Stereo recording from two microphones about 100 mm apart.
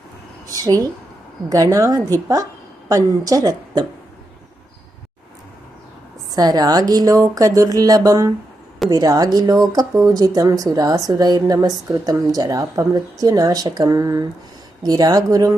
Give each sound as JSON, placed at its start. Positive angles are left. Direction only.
{"t": 0.4, "sound": "a sound", "side_deg": -40}
{"t": 1.5, "sound": "speech", "side_deg": -40}
{"t": 6.3, "sound": "speech", "side_deg": -40}